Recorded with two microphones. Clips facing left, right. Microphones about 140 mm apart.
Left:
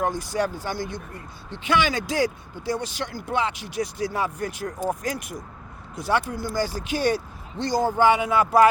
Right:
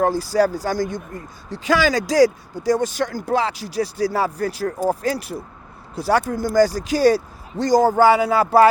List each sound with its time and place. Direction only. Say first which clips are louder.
0.0 s speech: right 7 dB; 35° right (ahead or behind)